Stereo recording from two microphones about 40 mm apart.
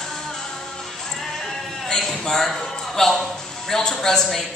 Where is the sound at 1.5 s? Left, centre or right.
Centre.